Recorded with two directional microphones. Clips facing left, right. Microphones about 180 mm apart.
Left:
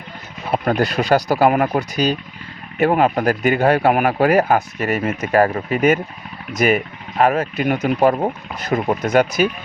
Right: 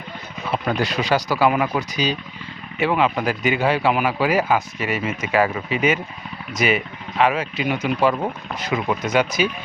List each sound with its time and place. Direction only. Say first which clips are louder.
0.5 s speech: left 4 dB; 50° left (ahead or behind)